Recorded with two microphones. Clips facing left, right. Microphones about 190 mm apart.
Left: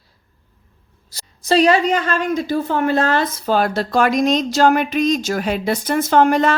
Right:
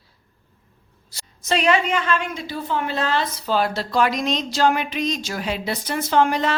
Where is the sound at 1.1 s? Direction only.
35° left (ahead or behind).